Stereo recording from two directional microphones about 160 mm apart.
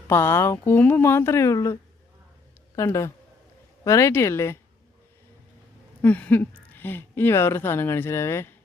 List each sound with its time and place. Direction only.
0.1 s speech: 15° left (ahead or behind)
6.0 s speech: 10° left (ahead or behind)